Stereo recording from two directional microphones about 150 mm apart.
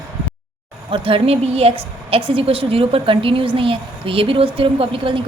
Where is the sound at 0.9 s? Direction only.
35° right (ahead or behind).